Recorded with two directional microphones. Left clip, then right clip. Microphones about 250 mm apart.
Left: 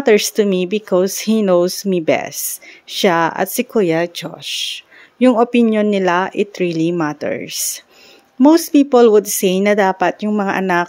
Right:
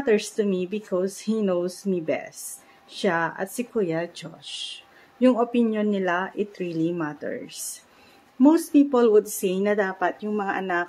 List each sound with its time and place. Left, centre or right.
0.0 s speech: left